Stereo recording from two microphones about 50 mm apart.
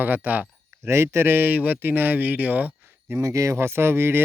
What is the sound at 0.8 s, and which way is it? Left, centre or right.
Speech, right.